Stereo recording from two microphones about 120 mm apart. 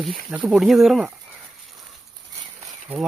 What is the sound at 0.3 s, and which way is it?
Speech, 5° right (ahead or behind).